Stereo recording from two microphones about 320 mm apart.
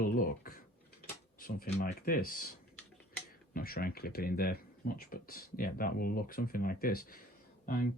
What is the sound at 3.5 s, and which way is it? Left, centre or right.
Speech, left.